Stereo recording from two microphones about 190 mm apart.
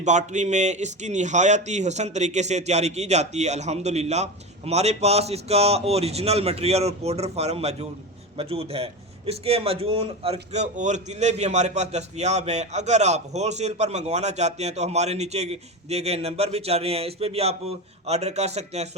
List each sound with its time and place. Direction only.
0.0 s a man's voice: 40° right (ahead or behind)